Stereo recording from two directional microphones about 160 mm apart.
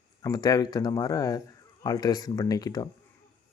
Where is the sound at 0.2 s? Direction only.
25° left (ahead or behind).